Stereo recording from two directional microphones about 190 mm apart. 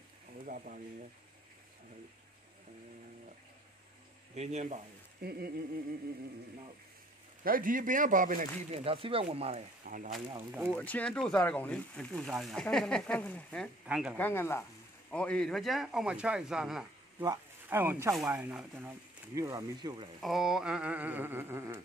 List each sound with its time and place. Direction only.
0.5 s speech: 45° right (ahead or behind)
4.4 s speech: 35° right (ahead or behind)
5.2 s a sound: 55° right (ahead or behind)
7.4 s speech: 45° right (ahead or behind)
8.6 s speech: 30° right (ahead or behind)
9.8 s speech: 45° right (ahead or behind)
10.7 s speech: 5° left (ahead or behind)
13.8 s speech: 5° right (ahead or behind)
14.1 s a woman's voice: 10° left (ahead or behind)
17.2 s speech: 15° right (ahead or behind)
20.2 s speech: centre (ahead or behind)